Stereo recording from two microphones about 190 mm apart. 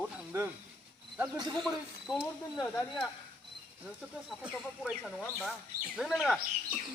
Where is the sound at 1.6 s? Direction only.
Centre (ahead or behind).